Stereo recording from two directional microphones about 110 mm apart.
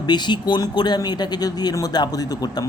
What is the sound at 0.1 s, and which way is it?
Speech, 40° left (ahead or behind).